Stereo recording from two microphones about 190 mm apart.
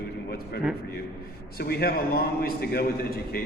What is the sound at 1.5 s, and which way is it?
A man's voice, 55° left (ahead or behind).